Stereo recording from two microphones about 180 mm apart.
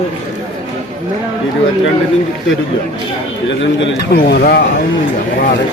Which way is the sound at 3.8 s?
65° left (ahead or behind).